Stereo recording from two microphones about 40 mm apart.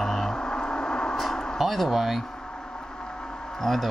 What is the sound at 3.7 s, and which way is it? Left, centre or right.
Speech, centre.